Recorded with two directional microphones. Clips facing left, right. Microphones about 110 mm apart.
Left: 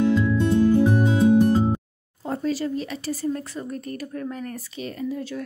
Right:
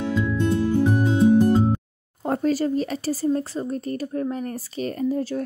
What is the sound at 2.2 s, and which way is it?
Speech, 50° right (ahead or behind).